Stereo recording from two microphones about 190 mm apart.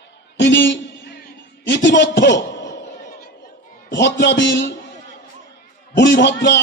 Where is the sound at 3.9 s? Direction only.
65° left (ahead or behind).